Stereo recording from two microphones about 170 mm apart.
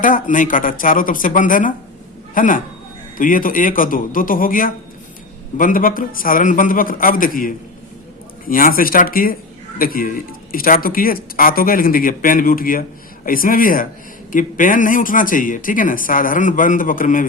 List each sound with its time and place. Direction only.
0.0 s a man's voice: 50° left (ahead or behind)